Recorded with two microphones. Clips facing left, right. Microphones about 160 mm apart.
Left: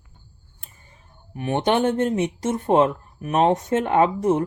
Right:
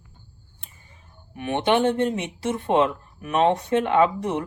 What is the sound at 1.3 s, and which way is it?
Speech, 40° left (ahead or behind).